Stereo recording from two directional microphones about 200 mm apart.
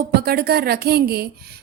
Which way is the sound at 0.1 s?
50° right (ahead or behind).